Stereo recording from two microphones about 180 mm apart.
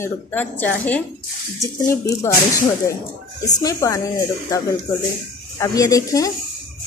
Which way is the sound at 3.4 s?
20° left (ahead or behind).